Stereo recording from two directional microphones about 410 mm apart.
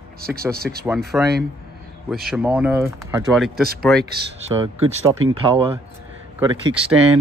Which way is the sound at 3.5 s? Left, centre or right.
Right.